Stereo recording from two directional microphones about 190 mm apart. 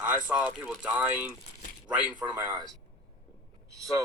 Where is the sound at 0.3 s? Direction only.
5° right (ahead or behind).